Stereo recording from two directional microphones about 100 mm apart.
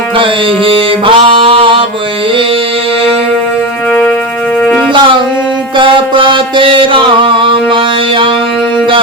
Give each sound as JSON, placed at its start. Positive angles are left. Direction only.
{"t": 0.2, "sound": "mantra", "side_deg": -60}
{"t": 5.7, "sound": "music", "side_deg": -60}